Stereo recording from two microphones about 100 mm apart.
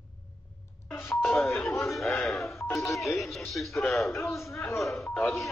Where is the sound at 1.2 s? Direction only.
Centre (ahead or behind).